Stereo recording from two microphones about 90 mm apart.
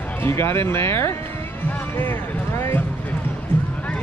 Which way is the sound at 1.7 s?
25° left (ahead or behind).